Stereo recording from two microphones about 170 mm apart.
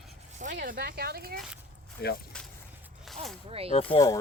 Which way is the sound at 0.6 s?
70° right (ahead or behind).